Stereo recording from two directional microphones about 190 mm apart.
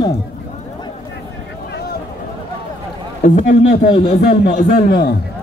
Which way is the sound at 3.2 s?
35° left (ahead or behind).